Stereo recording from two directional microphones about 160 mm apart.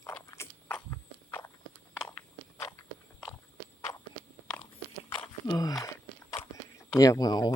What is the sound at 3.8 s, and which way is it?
Walk, 20° left (ahead or behind).